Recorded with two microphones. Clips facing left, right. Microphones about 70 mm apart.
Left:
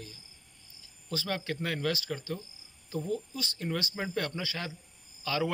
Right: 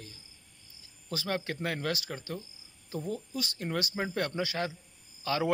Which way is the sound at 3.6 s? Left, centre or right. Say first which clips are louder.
Even; right.